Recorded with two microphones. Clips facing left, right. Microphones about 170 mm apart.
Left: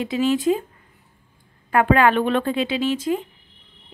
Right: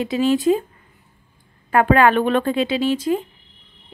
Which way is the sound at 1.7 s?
40° right (ahead or behind).